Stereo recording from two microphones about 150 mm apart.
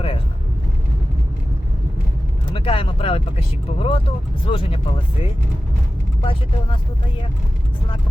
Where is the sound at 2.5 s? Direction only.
35° left (ahead or behind).